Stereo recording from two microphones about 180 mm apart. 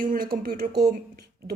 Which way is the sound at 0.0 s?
50° right (ahead or behind).